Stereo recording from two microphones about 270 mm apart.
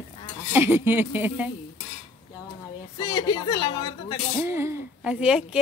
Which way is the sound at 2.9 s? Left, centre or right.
Centre.